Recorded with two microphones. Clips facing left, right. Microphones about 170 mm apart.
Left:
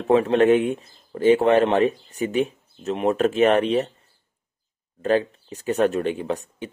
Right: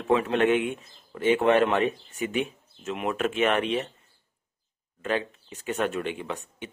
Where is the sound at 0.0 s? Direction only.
35° left (ahead or behind).